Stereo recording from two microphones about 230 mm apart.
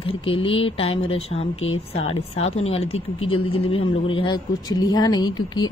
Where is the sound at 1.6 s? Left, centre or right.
Left.